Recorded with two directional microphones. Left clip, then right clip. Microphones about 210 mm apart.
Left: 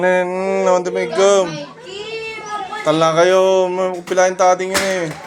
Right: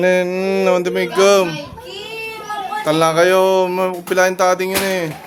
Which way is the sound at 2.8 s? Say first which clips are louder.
Left 1 dB; 20° right (ahead or behind).